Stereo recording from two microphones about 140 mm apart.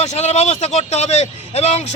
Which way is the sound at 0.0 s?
50° left (ahead or behind).